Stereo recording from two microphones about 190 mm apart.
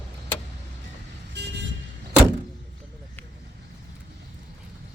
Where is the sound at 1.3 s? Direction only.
65° right (ahead or behind).